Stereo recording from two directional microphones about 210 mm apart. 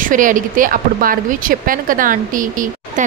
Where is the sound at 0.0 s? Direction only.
40° right (ahead or behind).